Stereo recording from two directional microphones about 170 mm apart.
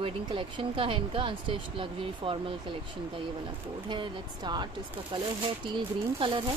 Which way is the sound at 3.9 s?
25° right (ahead or behind).